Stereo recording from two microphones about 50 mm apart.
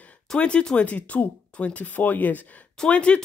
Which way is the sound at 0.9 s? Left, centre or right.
Left.